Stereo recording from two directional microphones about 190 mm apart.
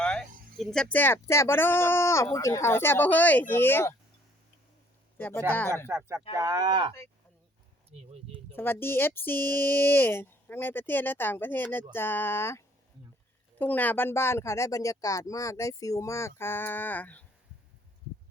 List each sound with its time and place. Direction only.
0.0 s speech: 5° left (ahead or behind)
5.1 s speech: 10° left (ahead or behind)
5.9 s speech: 15° right (ahead or behind); by 8.5 s 35° right (ahead or behind)
8.5 s speech: 10° left (ahead or behind)